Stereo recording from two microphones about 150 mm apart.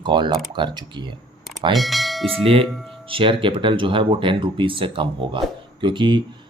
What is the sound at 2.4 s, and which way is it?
Speech, 40° right (ahead or behind).